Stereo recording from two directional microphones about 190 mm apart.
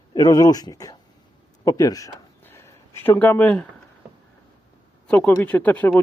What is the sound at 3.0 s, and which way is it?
Speech, 10° left (ahead or behind).